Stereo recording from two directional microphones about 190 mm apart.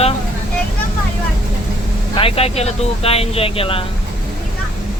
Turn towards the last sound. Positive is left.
turn(degrees=30)  # may be behind; listen again after turning